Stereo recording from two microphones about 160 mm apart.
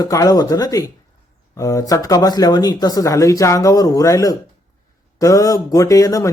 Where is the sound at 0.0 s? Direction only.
20° left (ahead or behind).